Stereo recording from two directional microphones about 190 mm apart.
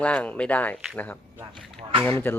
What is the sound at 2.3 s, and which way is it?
Speech, 10° left (ahead or behind).